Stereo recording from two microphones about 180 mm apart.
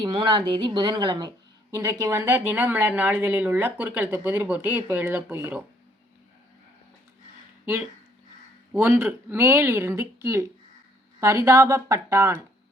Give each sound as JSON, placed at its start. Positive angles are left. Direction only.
{"t": 0.0, "sound": "speech", "side_deg": -25}
{"t": 7.6, "sound": "speech", "side_deg": -10}